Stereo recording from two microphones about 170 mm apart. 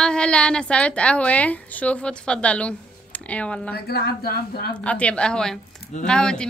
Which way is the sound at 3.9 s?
65° left (ahead or behind).